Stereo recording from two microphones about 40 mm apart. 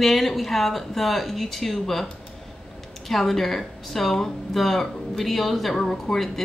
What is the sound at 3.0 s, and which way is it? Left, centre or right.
Speech, centre.